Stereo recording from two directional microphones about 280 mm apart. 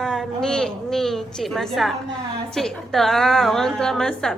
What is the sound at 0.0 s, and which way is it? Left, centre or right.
A woman's voice, centre.